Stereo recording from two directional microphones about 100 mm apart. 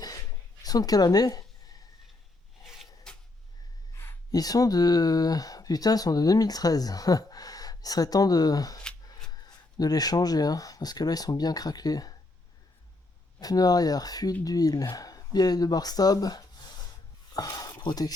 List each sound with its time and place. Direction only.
0.6 s a sound: 40° left (ahead or behind)
2.6 s rub: 5° right (ahead or behind)
4.3 s speech: 40° left (ahead or behind)
13.4 s speech: 40° left (ahead or behind)